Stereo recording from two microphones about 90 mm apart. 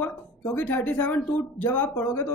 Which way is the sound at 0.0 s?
20° left (ahead or behind).